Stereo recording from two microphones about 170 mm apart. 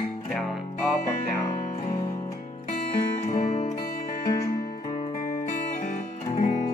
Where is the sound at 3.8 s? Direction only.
60° left (ahead or behind).